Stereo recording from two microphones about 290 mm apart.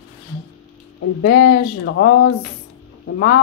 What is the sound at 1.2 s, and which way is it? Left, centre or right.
Speech, left.